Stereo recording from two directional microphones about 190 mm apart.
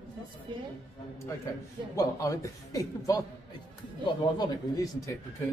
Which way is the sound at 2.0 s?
15° left (ahead or behind).